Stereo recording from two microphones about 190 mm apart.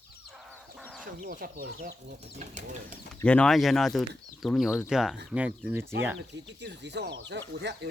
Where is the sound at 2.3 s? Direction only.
35° right (ahead or behind).